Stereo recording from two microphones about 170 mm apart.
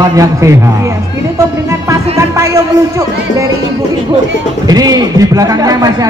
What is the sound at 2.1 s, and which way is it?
Music, 15° right (ahead or behind).